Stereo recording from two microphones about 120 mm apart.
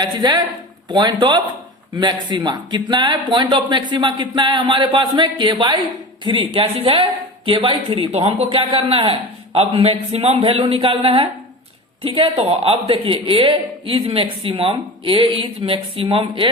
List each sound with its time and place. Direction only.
0.0 s speech: 35° right (ahead or behind)